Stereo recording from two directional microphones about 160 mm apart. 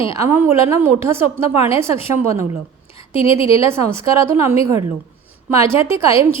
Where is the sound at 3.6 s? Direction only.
15° right (ahead or behind).